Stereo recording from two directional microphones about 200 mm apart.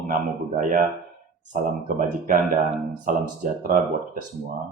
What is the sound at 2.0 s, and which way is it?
Speech, 45° right (ahead or behind).